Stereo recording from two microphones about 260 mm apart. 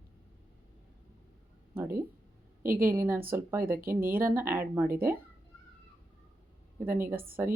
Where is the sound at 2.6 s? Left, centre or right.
Right.